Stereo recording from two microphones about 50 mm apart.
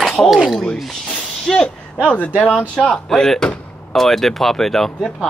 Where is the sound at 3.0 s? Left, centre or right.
Centre.